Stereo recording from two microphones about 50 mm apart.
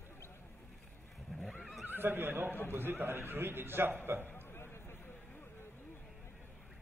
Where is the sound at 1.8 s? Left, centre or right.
Right.